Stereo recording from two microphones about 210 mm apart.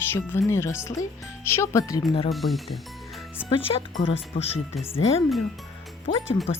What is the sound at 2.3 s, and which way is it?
Music, centre (ahead or behind).